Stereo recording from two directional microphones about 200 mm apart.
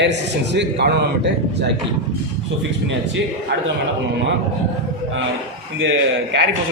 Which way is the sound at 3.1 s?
65° right (ahead or behind).